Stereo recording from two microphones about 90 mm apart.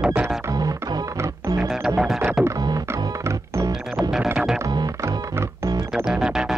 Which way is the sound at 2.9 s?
30° right (ahead or behind).